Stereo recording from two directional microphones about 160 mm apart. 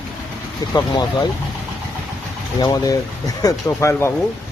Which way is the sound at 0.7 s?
25° left (ahead or behind).